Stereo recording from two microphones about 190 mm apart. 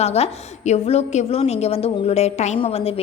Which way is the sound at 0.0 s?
35° left (ahead or behind).